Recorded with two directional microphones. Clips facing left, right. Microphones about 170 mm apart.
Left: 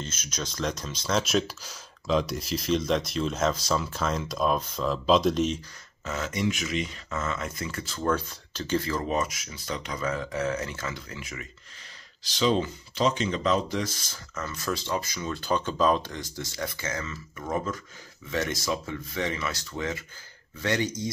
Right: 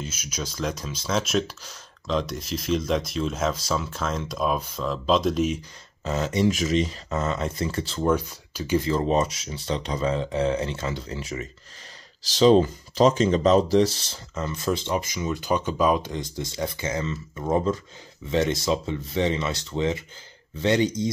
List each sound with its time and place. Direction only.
0.0 s speech: 10° right (ahead or behind)
6.0 s speech: 35° right (ahead or behind)
8.0 s speech: 15° right (ahead or behind)